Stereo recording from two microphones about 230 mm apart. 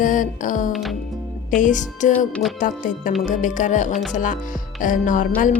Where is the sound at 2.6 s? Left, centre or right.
Left.